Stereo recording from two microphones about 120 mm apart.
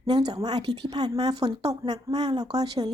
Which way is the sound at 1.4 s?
60° right (ahead or behind).